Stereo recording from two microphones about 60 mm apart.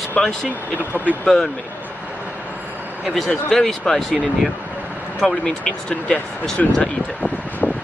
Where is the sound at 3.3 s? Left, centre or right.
Centre.